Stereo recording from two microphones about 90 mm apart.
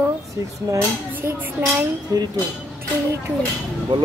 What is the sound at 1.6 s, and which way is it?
Speech, 25° right (ahead or behind).